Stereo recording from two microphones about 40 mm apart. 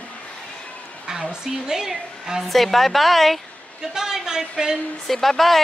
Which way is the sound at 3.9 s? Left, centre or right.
Centre.